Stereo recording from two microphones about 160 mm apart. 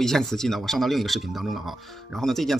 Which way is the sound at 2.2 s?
Centre (ahead or behind).